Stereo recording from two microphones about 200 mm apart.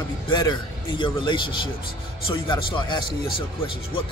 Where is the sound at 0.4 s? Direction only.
25° left (ahead or behind).